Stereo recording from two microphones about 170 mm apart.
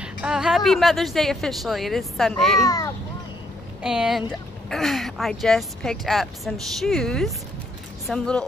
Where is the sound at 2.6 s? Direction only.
20° left (ahead or behind).